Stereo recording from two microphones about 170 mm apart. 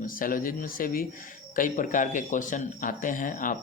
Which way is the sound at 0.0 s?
55° left (ahead or behind).